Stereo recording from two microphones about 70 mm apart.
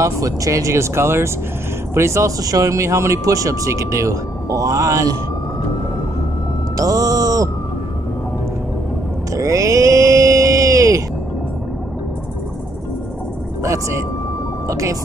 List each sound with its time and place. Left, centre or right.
0.0 s speech: right
6.8 s music: right
9.3 s a sound: right
13.6 s speech: right